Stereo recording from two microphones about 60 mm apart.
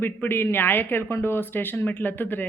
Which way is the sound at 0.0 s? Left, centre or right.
Left.